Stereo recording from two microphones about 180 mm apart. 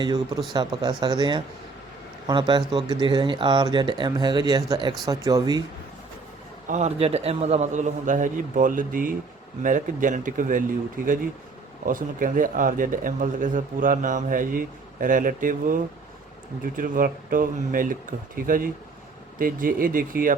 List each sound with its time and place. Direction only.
0.0 s speech: 20° right (ahead or behind)
6.7 s speech: 40° right (ahead or behind)